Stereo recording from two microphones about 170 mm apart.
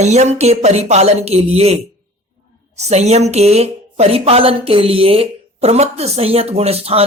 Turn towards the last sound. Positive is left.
turn(degrees=-35)  # may be behind; listen again after turning